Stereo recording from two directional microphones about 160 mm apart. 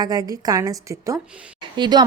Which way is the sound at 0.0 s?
25° right (ahead or behind).